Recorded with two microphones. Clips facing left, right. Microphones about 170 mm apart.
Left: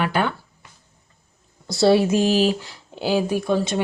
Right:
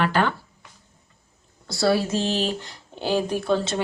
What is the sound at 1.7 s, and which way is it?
Speech, 25° left (ahead or behind).